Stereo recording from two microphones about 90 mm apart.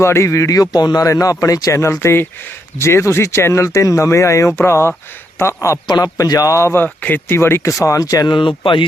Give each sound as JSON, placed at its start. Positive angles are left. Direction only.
{"t": 0.0, "sound": "speech", "side_deg": 30}
{"t": 5.9, "sound": "speech", "side_deg": 45}
{"t": 6.8, "sound": "speech", "side_deg": 20}
{"t": 8.4, "sound": "speech", "side_deg": 70}